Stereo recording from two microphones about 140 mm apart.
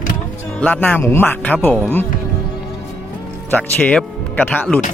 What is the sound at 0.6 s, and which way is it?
Speech, 10° left (ahead or behind).